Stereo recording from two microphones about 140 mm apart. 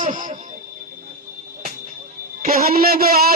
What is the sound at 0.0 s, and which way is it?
Music, 65° right (ahead or behind).